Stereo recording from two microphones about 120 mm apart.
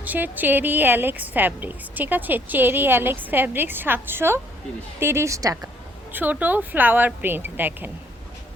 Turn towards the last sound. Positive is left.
turn(degrees=-15)  # may be behind; listen again after turning